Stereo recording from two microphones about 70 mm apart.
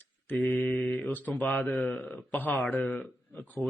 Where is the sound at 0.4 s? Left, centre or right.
Left.